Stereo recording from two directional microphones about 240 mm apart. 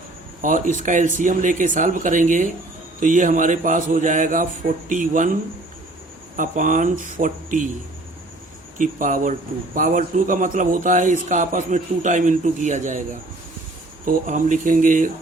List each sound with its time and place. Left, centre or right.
0.4 s a man's voice: right
6.3 s a man's voice: right
8.8 s a man's voice: right
14.0 s a man's voice: right